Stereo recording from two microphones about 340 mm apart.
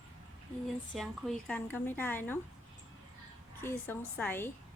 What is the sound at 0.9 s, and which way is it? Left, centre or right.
A woman's voice, centre.